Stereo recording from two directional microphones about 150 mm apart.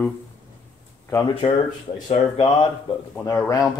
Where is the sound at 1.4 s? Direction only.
45° left (ahead or behind).